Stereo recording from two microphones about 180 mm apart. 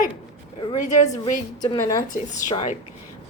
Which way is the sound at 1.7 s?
25° left (ahead or behind).